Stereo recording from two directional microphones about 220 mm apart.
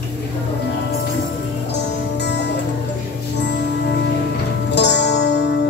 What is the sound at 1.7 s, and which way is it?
Music, 50° left (ahead or behind).